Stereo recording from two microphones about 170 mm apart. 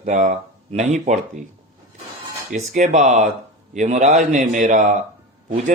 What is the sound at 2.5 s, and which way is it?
Speech, 45° right (ahead or behind).